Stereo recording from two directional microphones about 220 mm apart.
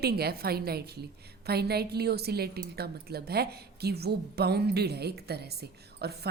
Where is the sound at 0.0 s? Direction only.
45° right (ahead or behind).